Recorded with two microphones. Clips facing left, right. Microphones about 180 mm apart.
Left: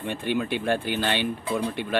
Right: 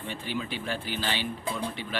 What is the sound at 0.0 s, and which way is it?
Speech, 60° left (ahead or behind).